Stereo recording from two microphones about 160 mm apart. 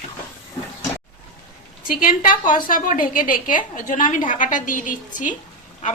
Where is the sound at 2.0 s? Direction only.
60° left (ahead or behind).